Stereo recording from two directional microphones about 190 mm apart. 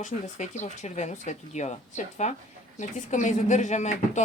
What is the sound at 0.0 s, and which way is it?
Speech, 40° left (ahead or behind).